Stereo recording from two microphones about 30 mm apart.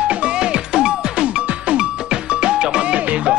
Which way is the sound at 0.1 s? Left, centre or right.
Right.